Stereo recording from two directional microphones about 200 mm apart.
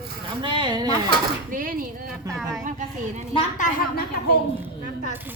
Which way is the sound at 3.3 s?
35° left (ahead or behind).